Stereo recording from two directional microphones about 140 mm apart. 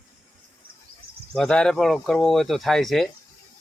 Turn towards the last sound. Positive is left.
turn(degrees=0)  # may be behind; listen again after turning